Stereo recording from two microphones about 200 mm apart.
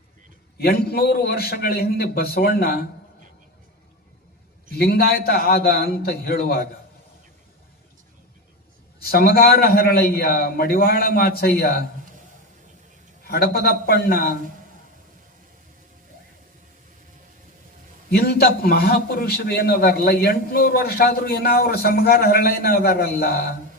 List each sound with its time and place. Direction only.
0.6 s a man's voice: 50° left (ahead or behind)
4.8 s a man's voice: 50° left (ahead or behind)
9.0 s a man's voice: 50° left (ahead or behind)
13.2 s a man's voice: 50° left (ahead or behind)
18.1 s a man's voice: 50° left (ahead or behind)